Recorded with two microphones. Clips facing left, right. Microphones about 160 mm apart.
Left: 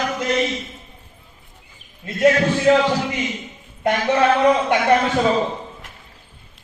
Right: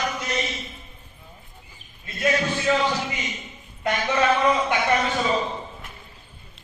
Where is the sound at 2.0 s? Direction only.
75° left (ahead or behind).